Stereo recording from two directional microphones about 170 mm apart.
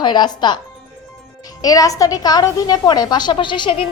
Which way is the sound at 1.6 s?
20° left (ahead or behind).